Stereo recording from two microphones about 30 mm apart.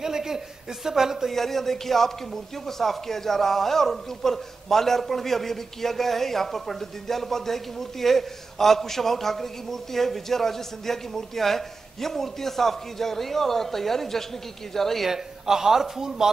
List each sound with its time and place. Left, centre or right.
0.0 s a sound: centre
0.8 s a man's voice: centre
1.3 s speech: centre
15.0 s a man's voice: centre